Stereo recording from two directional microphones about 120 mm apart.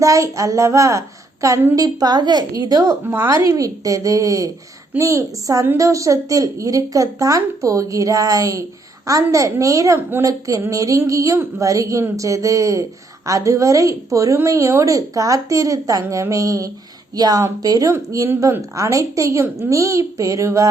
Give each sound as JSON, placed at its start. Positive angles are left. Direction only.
{"t": 0.0, "sound": "a woman's voice", "side_deg": -25}